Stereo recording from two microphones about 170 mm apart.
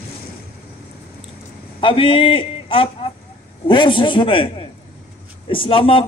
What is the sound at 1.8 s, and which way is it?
A man's voice, 30° left (ahead or behind).